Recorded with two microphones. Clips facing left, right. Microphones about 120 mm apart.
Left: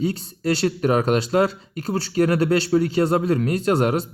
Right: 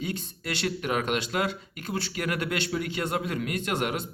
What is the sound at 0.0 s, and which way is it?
Speech, 35° left (ahead or behind).